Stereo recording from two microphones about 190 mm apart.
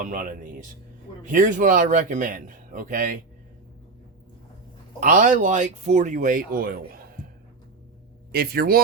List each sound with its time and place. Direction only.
0.0 s speech: 45° right (ahead or behind)
4.9 s speech: 45° right (ahead or behind)
8.3 s speech: 55° right (ahead or behind)